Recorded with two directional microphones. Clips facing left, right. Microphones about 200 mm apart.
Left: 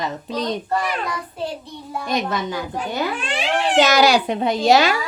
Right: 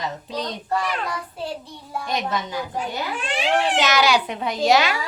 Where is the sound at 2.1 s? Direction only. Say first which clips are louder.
Left 3 dB; 55° left (ahead or behind).